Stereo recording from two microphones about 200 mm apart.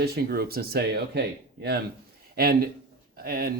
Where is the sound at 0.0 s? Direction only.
50° right (ahead or behind).